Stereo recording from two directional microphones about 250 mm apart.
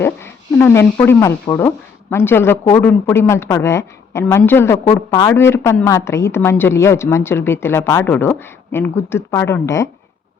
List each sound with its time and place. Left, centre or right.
0.0 s a woman's voice: centre